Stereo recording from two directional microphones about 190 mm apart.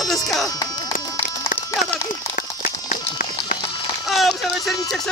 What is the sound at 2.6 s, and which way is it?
Run, 45° left (ahead or behind).